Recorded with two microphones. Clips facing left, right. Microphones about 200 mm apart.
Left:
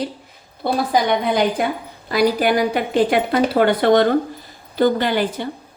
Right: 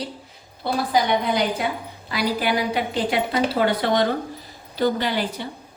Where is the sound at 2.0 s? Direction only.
45° left (ahead or behind).